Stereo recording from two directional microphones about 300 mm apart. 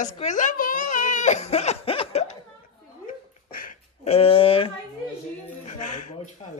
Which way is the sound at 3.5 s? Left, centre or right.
Left.